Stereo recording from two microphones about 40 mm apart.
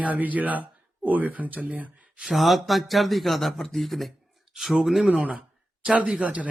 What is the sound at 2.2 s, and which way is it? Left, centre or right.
Speech, centre.